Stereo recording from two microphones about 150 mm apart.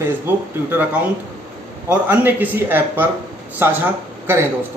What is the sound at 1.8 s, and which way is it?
A man's voice, 15° right (ahead or behind).